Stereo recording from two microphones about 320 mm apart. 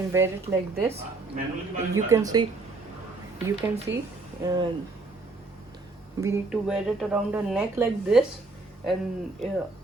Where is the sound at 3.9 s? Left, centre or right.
Right.